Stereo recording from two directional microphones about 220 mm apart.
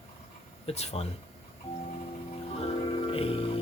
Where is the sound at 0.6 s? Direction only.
30° left (ahead or behind).